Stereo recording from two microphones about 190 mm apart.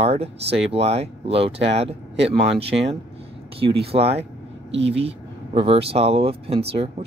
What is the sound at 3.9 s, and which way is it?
Speech, 30° right (ahead or behind).